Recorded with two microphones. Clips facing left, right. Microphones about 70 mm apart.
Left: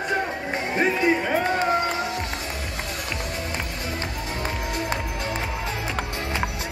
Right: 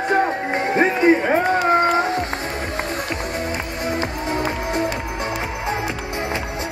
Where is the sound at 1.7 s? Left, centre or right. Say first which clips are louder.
Right 7 dB; right.